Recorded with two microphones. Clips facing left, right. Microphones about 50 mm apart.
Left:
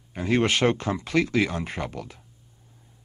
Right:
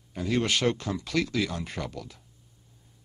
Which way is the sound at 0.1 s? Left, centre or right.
Left.